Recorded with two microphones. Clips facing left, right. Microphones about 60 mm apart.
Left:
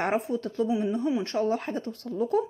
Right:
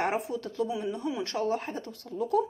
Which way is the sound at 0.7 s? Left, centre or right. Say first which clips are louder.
Left 6 dB; left.